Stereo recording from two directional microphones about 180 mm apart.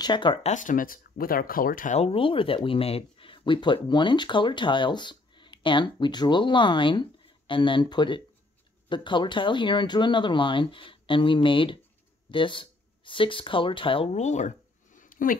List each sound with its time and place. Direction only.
0.0 s speech: 25° left (ahead or behind)
0.5 s speech: 45° left (ahead or behind)
15.0 s a sound: 50° left (ahead or behind)